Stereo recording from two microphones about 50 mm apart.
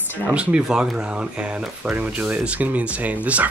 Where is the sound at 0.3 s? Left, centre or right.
Right.